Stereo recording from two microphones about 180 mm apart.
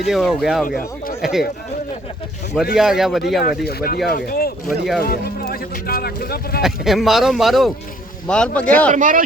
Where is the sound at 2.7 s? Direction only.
Centre (ahead or behind).